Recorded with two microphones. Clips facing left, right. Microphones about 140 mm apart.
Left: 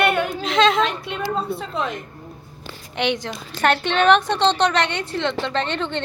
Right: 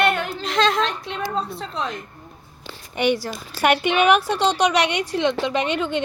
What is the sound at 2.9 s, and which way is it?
A woman's voice, 10° right (ahead or behind).